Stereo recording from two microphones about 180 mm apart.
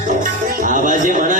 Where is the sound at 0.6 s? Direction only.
45° right (ahead or behind).